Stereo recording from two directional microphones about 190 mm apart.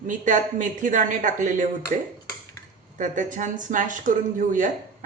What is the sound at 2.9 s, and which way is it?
Speech, 40° right (ahead or behind).